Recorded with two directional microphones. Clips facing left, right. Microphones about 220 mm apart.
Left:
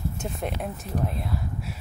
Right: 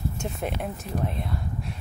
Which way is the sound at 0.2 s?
Centre (ahead or behind).